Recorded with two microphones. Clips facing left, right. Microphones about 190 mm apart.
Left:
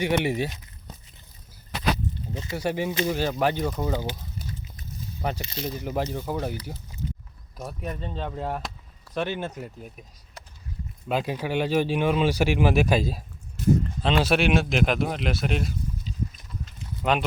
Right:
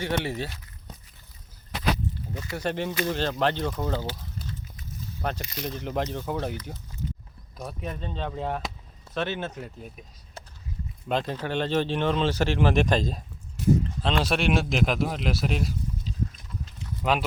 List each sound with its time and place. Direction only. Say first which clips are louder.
0.0 s speech: left 4 dB; 15° left (ahead or behind)
2.2 s speech: left 2 dB; 20° left (ahead or behind)
2.6 s speech: left 2 dB; 10° left (ahead or behind)
11.1 s speech: left 1 dB; 10° left (ahead or behind)
17.0 s speech: left 1 dB; centre (ahead or behind)